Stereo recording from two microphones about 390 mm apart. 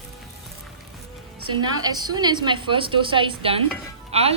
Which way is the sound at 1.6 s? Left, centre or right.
Centre.